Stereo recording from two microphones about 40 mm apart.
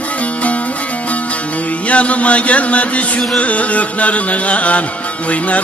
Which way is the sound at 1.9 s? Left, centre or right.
Left.